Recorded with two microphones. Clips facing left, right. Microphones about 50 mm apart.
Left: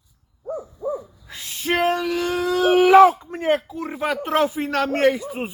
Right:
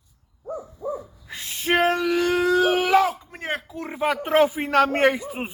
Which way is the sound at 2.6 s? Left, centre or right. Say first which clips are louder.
Left 3 dB; centre.